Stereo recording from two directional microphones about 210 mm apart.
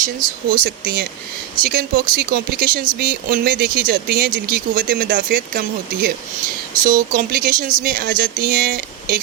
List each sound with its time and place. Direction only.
0.5 s speech: 45° right (ahead or behind)